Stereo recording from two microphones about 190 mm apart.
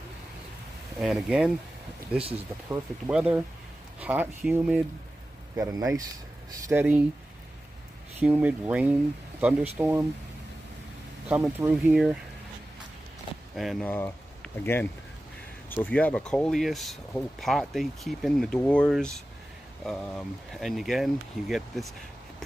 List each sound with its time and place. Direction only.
0.9 s speech: centre (ahead or behind)
5.6 s speech: 20° right (ahead or behind)
8.2 s speech: 10° right (ahead or behind)
11.2 s speech: 10° right (ahead or behind)
13.6 s speech: centre (ahead or behind)